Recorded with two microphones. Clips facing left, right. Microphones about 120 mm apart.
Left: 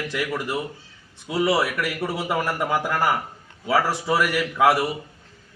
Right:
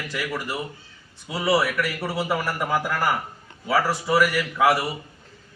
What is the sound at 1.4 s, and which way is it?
A man's voice, 20° left (ahead or behind).